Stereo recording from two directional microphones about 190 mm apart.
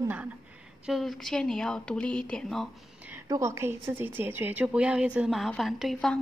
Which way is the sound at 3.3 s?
15° right (ahead or behind).